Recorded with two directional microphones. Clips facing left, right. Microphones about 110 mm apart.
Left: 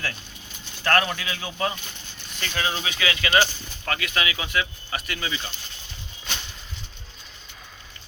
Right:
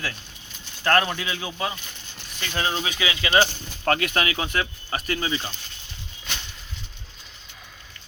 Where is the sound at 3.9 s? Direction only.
50° right (ahead or behind); by 5.5 s 30° right (ahead or behind).